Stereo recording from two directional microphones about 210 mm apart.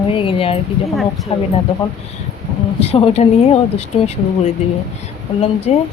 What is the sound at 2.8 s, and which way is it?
Speech, 30° left (ahead or behind).